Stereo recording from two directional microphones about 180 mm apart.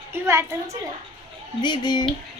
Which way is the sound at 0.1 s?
15° right (ahead or behind).